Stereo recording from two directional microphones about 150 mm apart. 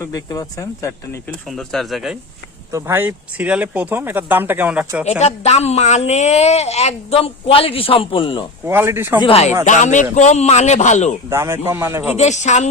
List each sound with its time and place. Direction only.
0.0 s speech: 25° left (ahead or behind)
1.5 s speech: centre (ahead or behind)
2.7 s speech: 15° right (ahead or behind)
5.2 s speech: 45° left (ahead or behind)
8.6 s speech: 15° right (ahead or behind)
9.2 s speech: 40° left (ahead or behind)
9.6 s speech: 55° left (ahead or behind)
11.3 s speech: 15° right (ahead or behind)
12.1 s speech: 50° left (ahead or behind)